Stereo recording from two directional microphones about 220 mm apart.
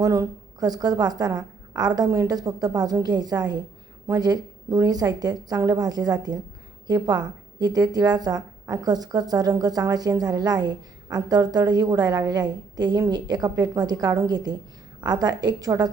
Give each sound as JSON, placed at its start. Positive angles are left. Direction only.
{"t": 0.0, "sound": "a woman's voice", "side_deg": -15}